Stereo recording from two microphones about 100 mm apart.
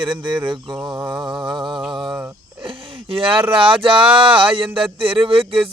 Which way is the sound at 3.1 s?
65° right (ahead or behind).